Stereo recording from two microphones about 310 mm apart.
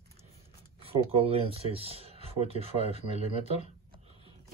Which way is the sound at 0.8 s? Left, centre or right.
Centre.